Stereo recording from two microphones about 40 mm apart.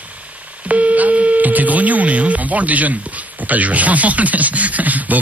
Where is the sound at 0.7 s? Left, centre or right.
Right.